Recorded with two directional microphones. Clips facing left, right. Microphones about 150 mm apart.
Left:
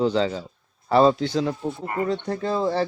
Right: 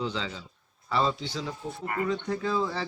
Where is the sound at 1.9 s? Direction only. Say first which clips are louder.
Left 3 dB; 35° left (ahead or behind).